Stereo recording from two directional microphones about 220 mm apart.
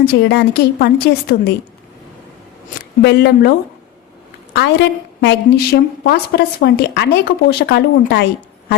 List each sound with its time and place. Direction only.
0.0 s a woman's voice: 50° left (ahead or behind)
3.0 s a woman's voice: 50° left (ahead or behind)
4.5 s a woman's voice: 50° left (ahead or behind)